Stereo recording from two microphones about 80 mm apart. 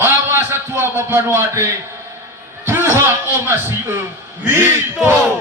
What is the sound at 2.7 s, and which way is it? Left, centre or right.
A man's voice, right.